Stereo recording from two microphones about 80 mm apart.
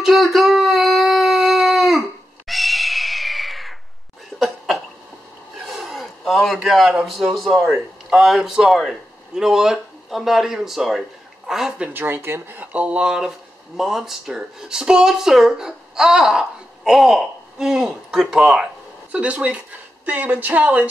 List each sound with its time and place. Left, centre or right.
0.0 s a sound: centre
4.4 s cough: centre
5.7 s a sound: centre
7.6 s speech: centre
11.9 s speech: right; by 18.7 s centre
19.1 s speech: centre